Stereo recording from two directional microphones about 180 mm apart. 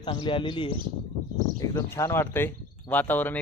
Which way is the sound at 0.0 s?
25° left (ahead or behind).